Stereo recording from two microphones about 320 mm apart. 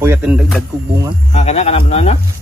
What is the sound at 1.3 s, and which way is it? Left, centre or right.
Speech, centre.